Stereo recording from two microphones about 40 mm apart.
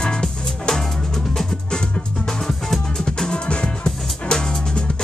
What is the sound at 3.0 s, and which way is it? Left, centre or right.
Music, centre.